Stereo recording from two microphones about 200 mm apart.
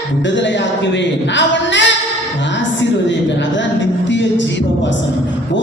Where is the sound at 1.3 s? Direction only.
65° left (ahead or behind).